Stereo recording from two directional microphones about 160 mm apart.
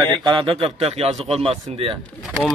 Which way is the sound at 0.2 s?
30° right (ahead or behind).